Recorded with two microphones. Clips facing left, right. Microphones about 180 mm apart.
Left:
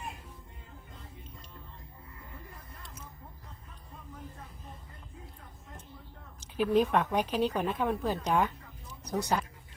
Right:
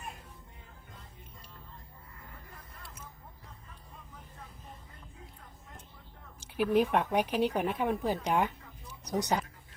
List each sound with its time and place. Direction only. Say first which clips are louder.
6.6 s a woman's voice: left 1 dB; 10° right (ahead or behind)